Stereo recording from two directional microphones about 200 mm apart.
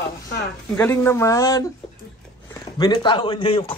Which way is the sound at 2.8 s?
20° left (ahead or behind).